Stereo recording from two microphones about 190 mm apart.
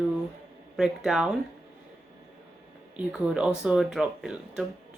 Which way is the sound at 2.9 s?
5° right (ahead or behind).